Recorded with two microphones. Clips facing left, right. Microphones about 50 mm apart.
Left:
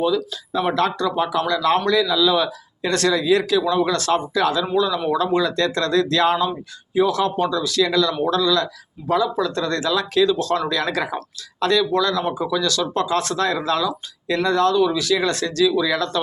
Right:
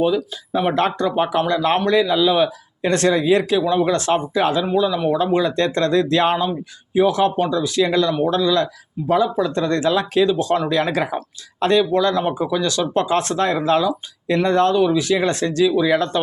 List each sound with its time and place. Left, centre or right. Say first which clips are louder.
0.0 s speech: right 2 dB; right